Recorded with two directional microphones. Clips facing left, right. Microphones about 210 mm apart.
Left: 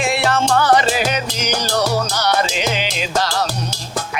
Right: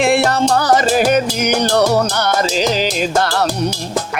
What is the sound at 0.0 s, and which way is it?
Music, 50° right (ahead or behind).